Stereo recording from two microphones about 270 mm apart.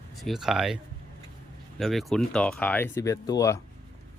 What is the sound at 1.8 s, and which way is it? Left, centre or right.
Speech, centre.